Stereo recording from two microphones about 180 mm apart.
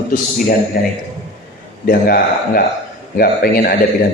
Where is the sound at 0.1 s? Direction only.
50° left (ahead or behind).